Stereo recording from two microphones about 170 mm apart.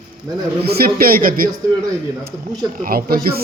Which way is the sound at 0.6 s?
65° right (ahead or behind).